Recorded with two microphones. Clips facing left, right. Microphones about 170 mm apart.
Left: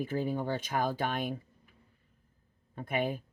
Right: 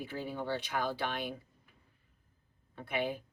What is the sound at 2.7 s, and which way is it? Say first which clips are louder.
Speech: left 3 dB; 45° left (ahead or behind).